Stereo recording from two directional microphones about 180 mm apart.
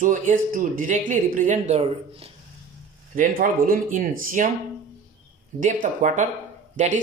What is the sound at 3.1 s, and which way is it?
Speech, 50° right (ahead or behind).